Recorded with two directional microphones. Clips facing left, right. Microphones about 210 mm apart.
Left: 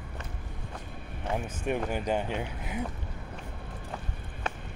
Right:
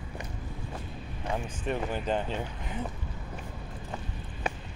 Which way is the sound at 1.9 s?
15° left (ahead or behind).